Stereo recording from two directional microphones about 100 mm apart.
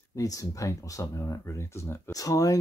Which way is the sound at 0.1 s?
35° left (ahead or behind).